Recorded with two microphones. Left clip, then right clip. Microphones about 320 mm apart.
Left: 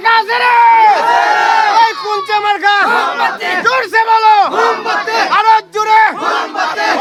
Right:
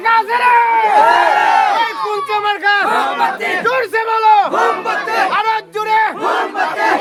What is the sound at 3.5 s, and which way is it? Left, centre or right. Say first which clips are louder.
Crowd: left 7 dB; left.